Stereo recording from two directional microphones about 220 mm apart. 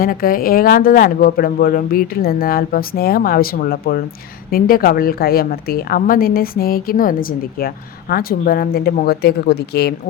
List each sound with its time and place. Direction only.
0.0 s a woman's voice: 40° left (ahead or behind)